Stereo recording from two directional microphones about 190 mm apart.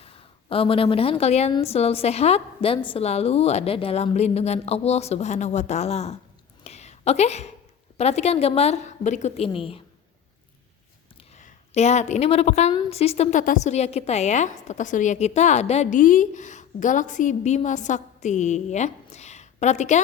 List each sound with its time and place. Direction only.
0.0 s a woman's voice: 30° left (ahead or behind)
6.7 s a sound: 35° left (ahead or behind)
7.9 s a woman's voice: 35° left (ahead or behind)
11.3 s a woman's voice: 35° left (ahead or behind)